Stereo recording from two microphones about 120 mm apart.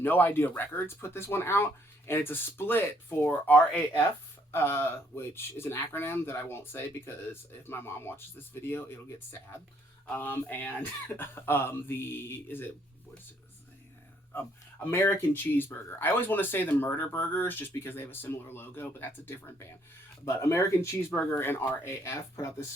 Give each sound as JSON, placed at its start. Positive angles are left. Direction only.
{"t": 0.0, "sound": "speech", "side_deg": 15}
{"t": 14.8, "sound": "speech", "side_deg": 20}